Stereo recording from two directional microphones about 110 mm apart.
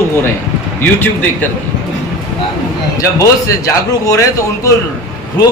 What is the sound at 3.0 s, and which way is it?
A man's voice, 30° left (ahead or behind).